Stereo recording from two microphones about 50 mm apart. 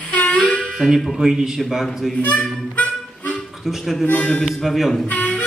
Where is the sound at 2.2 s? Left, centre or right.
Left.